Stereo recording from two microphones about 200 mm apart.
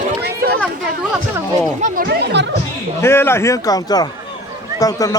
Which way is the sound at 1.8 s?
50° right (ahead or behind).